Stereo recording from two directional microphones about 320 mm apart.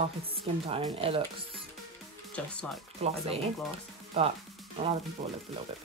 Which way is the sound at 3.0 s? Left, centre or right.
Centre.